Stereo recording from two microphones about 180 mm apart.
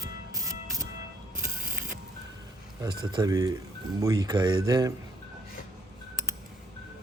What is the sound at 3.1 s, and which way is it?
Speech, 20° right (ahead or behind).